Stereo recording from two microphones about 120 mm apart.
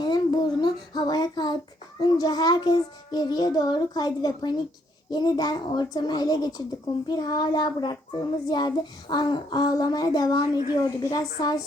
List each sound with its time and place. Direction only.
0.0 s child singing: 35° left (ahead or behind)